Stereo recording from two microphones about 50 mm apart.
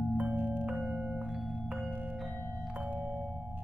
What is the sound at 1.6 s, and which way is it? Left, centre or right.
Marimba, right.